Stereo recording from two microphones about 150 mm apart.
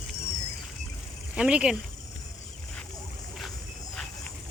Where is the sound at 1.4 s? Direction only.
5° right (ahead or behind).